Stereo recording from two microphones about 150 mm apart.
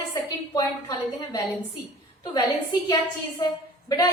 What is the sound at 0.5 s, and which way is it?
Speech, 25° left (ahead or behind).